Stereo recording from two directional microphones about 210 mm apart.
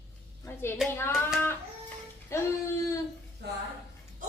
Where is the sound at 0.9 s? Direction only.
10° left (ahead or behind).